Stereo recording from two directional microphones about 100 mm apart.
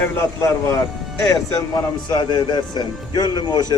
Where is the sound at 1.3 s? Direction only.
45° left (ahead or behind).